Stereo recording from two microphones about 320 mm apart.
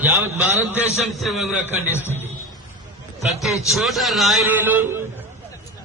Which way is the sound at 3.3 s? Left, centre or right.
Centre.